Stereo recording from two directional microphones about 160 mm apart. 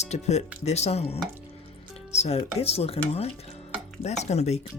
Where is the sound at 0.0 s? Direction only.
45° left (ahead or behind).